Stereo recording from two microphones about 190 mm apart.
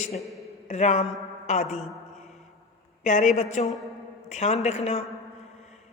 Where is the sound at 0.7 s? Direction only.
35° left (ahead or behind).